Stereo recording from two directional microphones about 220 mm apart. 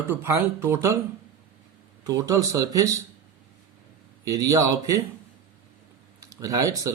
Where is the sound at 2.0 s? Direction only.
15° right (ahead or behind).